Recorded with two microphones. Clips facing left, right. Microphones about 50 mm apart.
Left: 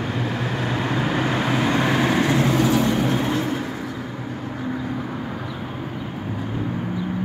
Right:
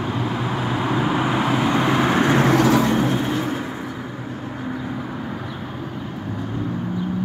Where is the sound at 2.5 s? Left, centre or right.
Right.